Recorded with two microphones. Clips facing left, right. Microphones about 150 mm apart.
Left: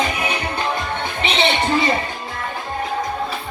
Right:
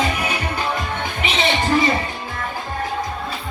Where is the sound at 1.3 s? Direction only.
30° left (ahead or behind).